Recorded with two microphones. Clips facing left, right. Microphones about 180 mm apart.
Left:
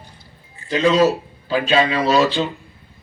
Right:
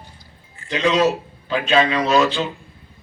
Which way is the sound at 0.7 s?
35° left (ahead or behind).